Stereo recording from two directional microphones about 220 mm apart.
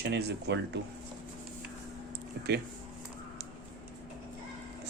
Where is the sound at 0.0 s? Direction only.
50° right (ahead or behind).